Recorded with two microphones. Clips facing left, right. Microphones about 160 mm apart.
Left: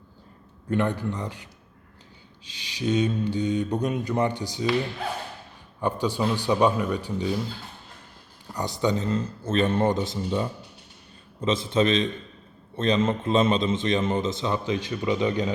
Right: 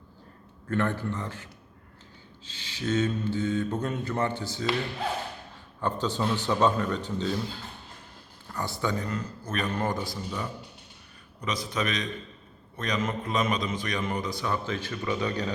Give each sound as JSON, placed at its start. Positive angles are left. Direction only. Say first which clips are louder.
{"t": 0.7, "sound": "speech", "louder": "left 3 dB", "side_deg": 15}
{"t": 5.8, "sound": "speech", "louder": "left 3 dB", "side_deg": 10}
{"t": 8.5, "sound": "a man's voice", "louder": "left 5 dB", "side_deg": 20}